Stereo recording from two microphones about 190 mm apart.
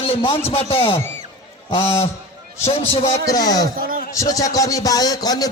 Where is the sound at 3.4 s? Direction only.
20° left (ahead or behind).